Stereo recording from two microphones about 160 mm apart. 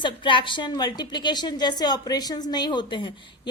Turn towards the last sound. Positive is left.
turn(degrees=30)  # may be behind; listen again after turning